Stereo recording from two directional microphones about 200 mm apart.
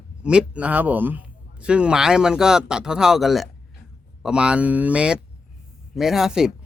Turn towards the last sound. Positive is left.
turn(degrees=-5)  # may be behind; listen again after turning